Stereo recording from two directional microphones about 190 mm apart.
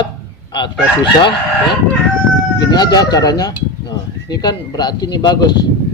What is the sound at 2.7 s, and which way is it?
Speech, 20° left (ahead or behind).